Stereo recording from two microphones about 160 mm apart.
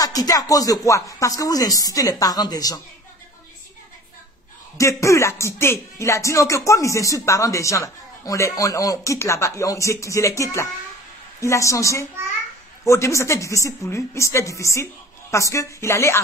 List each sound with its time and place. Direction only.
0.0 s a man's voice: 20° left (ahead or behind)
4.7 s a man's voice: 20° left (ahead or behind)